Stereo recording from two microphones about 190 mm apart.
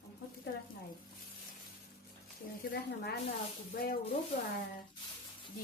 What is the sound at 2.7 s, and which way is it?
Speech, 55° left (ahead or behind).